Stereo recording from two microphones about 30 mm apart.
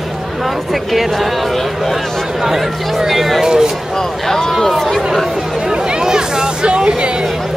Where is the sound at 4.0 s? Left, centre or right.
Centre.